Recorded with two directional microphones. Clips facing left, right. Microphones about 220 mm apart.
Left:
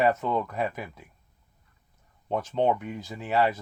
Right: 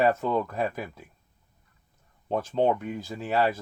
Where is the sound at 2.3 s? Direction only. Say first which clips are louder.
Right 1 dB; 35° right (ahead or behind).